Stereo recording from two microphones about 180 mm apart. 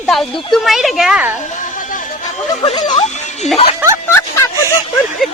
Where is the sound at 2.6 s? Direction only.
30° left (ahead or behind).